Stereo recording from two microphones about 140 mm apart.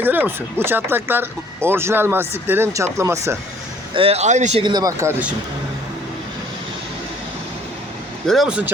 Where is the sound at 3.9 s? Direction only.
45° right (ahead or behind).